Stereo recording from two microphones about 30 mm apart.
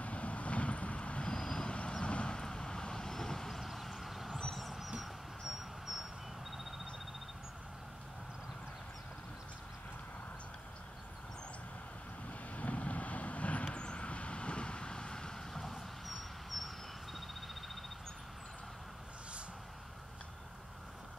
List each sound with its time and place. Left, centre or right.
0.0 s vehicle: left; by 4.3 s centre
4.5 s a sound: centre
12.3 s vehicle: left
13.7 s vehicle: left
15.5 s vehicle: centre
16.4 s a sound: centre